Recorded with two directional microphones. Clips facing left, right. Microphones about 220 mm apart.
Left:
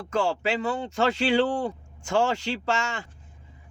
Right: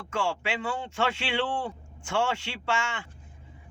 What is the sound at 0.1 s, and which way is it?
A man's voice, 40° left (ahead or behind).